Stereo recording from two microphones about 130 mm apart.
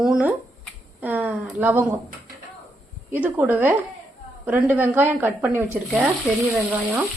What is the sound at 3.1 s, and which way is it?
A woman's voice, 10° right (ahead or behind).